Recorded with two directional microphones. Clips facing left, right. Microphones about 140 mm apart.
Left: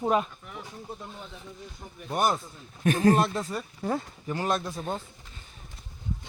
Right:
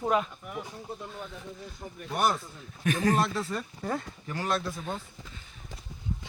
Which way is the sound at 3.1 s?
25° left (ahead or behind).